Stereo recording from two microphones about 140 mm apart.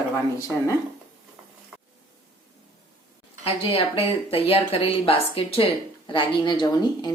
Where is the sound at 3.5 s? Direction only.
40° left (ahead or behind).